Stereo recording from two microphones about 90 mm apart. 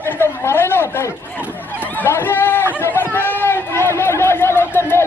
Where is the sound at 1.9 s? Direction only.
20° left (ahead or behind).